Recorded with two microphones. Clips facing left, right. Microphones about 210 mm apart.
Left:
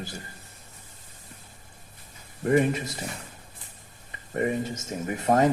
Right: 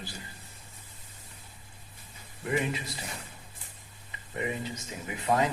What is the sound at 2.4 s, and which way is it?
Speech, 50° left (ahead or behind).